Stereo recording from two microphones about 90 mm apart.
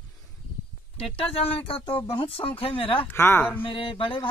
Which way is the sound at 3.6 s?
80° left.